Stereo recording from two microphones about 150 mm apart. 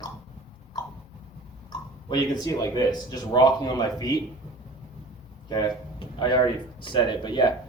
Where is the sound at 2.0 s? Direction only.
30° left (ahead or behind).